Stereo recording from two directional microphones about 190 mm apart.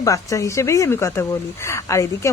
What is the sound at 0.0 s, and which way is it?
A woman's voice, 15° left (ahead or behind).